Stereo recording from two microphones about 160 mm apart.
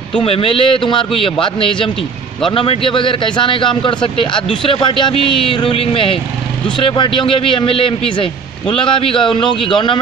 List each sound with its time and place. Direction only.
0.2 s a man's voice: 35° left (ahead or behind)